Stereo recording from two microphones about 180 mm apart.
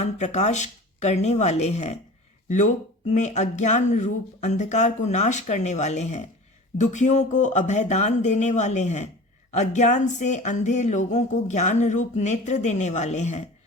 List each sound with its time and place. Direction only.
0.0 s speech: 40° left (ahead or behind)